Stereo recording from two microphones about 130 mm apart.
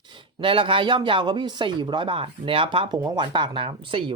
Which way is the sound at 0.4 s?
40° right (ahead or behind).